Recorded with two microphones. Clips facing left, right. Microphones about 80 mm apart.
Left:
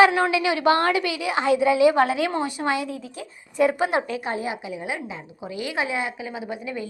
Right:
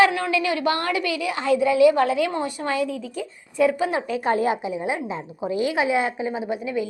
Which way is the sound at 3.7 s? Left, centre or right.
Left.